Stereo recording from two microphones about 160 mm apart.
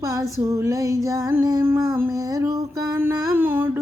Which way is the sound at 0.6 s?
20° right (ahead or behind).